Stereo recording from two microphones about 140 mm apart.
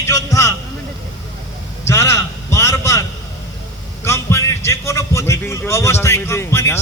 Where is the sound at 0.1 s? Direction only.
25° left (ahead or behind).